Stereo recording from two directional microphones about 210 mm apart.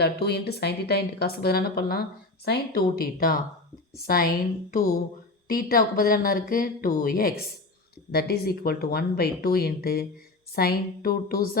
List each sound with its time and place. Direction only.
0.0 s a woman's voice: 50° left (ahead or behind)
4.7 s a sound: 40° left (ahead or behind)
5.5 s a woman's voice: 45° left (ahead or behind)